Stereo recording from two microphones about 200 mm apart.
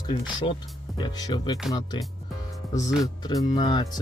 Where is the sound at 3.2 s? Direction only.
20° left (ahead or behind).